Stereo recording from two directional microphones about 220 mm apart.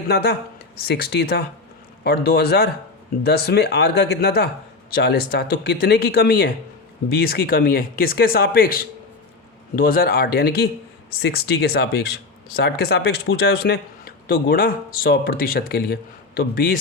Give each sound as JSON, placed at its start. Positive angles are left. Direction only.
{"t": 0.1, "sound": "speech", "side_deg": 45}